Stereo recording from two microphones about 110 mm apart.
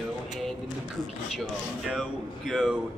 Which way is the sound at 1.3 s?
Centre (ahead or behind).